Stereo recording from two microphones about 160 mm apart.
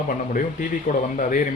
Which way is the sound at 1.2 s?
55° left (ahead or behind).